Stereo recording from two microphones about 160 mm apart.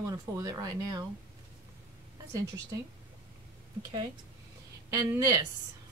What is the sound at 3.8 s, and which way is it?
Speech, 30° right (ahead or behind).